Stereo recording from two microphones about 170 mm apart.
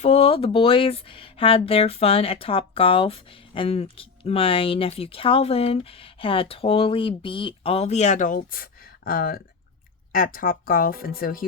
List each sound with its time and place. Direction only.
0.0 s speech: 35° left (ahead or behind); by 11.4 s 60° left (ahead or behind)